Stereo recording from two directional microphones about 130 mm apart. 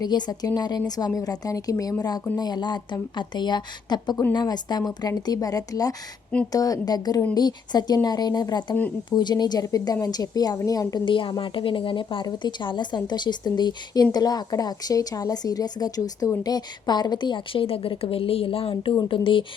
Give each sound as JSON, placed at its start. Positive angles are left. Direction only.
{"t": 0.0, "sound": "a woman's voice", "side_deg": 30}